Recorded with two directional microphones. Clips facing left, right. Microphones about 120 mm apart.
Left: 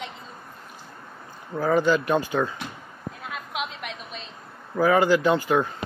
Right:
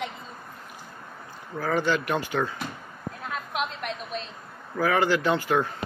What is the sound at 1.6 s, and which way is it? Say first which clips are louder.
Speech: left 4 dB; 10° left (ahead or behind).